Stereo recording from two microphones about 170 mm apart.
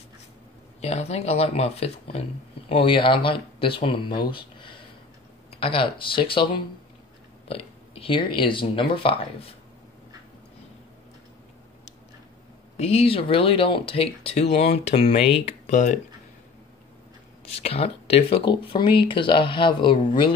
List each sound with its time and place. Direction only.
0.7 s speech: 40° left (ahead or behind)
12.7 s speech: 40° left (ahead or behind)
17.6 s speech: 35° left (ahead or behind)